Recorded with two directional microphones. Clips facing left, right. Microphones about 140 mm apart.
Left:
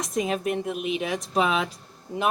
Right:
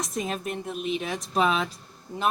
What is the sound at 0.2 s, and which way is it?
Speech, 10° left (ahead or behind).